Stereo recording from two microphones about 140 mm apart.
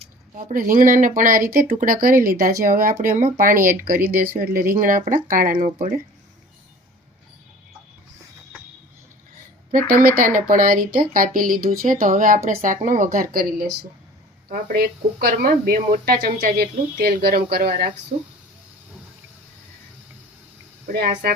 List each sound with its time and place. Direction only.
0.3 s speech: 70° right (ahead or behind); by 2.9 s 90° right
3.0 s speech: 65° right (ahead or behind)
9.7 s speech: 75° right (ahead or behind)
20.8 s speech: 85° right